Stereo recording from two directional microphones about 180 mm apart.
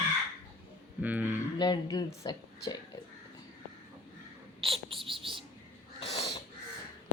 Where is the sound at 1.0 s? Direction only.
10° right (ahead or behind).